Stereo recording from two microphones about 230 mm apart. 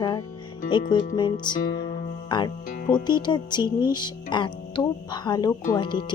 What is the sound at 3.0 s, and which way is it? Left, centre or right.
Speech, centre.